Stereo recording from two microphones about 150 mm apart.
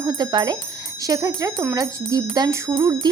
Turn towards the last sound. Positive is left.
turn(degrees=-25)  # may be behind; listen again after turning